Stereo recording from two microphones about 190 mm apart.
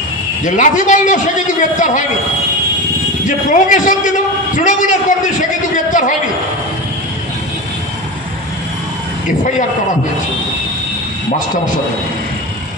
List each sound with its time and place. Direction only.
0.4 s a man's voice: 40° left (ahead or behind)
3.3 s a man's voice: 40° left (ahead or behind)